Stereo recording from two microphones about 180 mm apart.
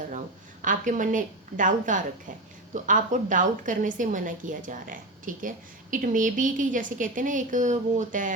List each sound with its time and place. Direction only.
0.6 s a woman's voice: 45° right (ahead or behind)